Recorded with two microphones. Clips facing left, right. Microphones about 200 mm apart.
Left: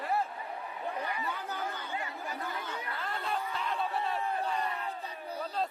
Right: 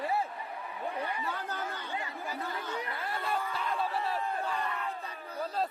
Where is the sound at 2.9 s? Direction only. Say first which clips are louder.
Left 1 dB; 5° right (ahead or behind).